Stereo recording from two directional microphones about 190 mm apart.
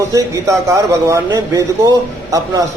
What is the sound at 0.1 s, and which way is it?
A man's voice, 15° right (ahead or behind).